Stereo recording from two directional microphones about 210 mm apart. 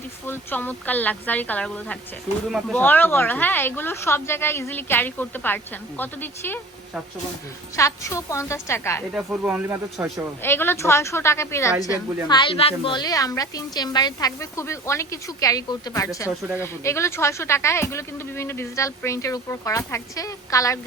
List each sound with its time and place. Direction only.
0.3 s a woman's voice: 10° left (ahead or behind)
7.8 s a woman's voice: 15° left (ahead or behind)
9.1 s speech: 5° right (ahead or behind)
10.4 s a woman's voice: 10° left (ahead or behind)